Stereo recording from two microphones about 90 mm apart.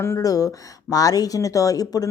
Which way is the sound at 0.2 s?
40° left (ahead or behind).